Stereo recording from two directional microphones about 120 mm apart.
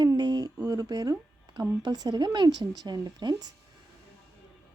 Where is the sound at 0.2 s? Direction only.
35° right (ahead or behind).